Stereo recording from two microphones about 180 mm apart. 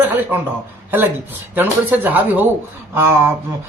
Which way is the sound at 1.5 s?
10° right (ahead or behind).